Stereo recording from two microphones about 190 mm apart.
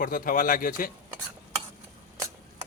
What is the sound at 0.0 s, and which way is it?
Speech, 45° left (ahead or behind).